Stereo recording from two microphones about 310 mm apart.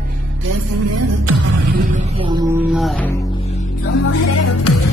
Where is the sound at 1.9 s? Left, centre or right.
Right.